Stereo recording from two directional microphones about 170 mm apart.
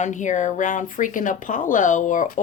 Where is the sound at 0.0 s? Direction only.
45° left (ahead or behind).